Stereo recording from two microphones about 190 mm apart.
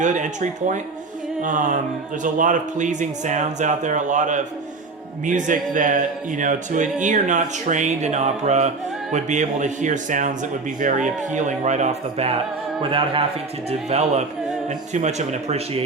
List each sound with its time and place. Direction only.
0.0 s a man's voice: 40° right (ahead or behind)
1.4 s music: 45° right (ahead or behind)
2.2 s a man's voice: 40° right (ahead or behind)